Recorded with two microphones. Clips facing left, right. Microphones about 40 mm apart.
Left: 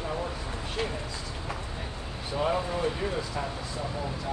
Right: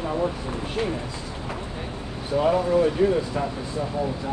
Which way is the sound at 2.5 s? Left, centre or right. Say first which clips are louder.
Right 9 dB; right.